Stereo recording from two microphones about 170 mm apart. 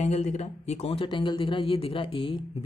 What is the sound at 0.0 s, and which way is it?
Speech, 40° left (ahead or behind).